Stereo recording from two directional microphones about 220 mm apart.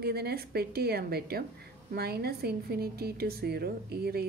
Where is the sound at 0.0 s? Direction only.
45° right (ahead or behind).